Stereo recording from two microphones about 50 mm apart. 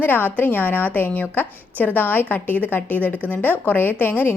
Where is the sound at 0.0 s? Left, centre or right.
Left.